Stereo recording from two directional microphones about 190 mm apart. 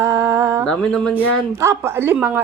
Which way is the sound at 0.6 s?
5° left (ahead or behind).